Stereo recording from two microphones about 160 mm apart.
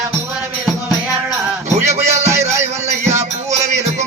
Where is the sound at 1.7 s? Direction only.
45° right (ahead or behind).